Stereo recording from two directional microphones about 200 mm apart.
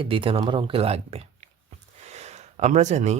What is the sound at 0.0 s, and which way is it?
Speech, 25° right (ahead or behind).